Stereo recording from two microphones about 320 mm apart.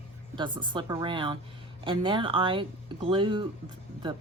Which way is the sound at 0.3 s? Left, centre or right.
Centre.